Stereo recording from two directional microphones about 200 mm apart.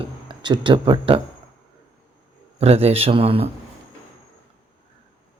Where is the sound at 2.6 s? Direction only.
30° right (ahead or behind).